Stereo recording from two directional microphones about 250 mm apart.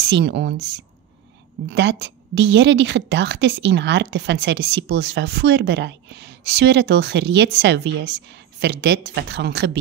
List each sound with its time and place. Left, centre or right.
0.0 s a woman's voice: right